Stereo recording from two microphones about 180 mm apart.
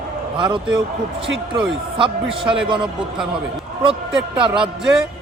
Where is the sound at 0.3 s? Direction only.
25° right (ahead or behind).